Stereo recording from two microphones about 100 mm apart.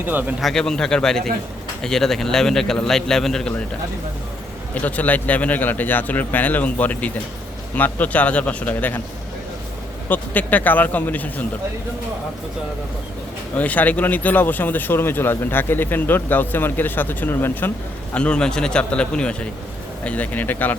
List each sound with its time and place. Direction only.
0.0 s a man's voice: 15° right (ahead or behind)
0.3 s a man's voice: 5° left (ahead or behind)
4.7 s a man's voice: 15° left (ahead or behind)
10.1 s a man's voice: 15° left (ahead or behind)
13.6 s a man's voice: 15° left (ahead or behind)